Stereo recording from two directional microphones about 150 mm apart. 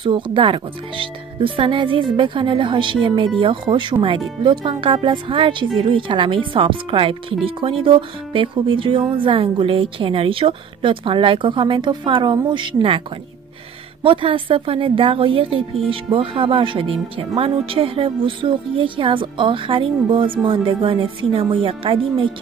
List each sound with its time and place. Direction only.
0.0 s speech: 35° right (ahead or behind)
14.0 s speech: 35° right (ahead or behind)